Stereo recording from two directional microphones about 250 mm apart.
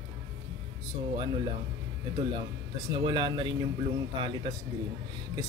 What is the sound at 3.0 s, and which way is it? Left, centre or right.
Speech, centre.